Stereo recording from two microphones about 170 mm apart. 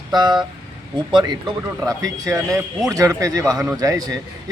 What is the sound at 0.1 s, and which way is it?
Speech, 25° right (ahead or behind).